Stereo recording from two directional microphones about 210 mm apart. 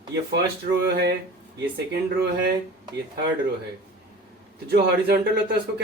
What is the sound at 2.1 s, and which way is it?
Speech, 50° right (ahead or behind).